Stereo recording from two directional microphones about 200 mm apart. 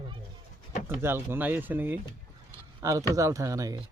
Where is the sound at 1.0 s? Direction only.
10° right (ahead or behind).